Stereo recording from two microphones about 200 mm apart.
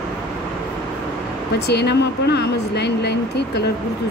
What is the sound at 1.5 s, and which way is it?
Speech, 55° left (ahead or behind).